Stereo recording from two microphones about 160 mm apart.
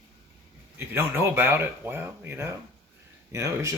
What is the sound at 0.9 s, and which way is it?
Speech, 15° right (ahead or behind).